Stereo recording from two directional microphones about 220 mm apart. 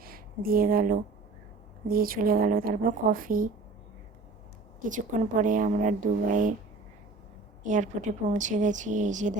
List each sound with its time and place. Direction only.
0.0 s a sound: 40° right (ahead or behind)
1.9 s a woman's voice: 40° right (ahead or behind)
4.9 s a woman's voice: 35° right (ahead or behind)
7.6 s a woman's voice: 35° right (ahead or behind)